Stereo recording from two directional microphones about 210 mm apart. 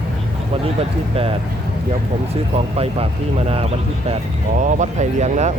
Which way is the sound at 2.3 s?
30° right (ahead or behind).